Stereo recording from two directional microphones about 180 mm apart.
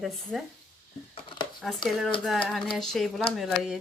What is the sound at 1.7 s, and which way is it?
A woman's voice, centre (ahead or behind).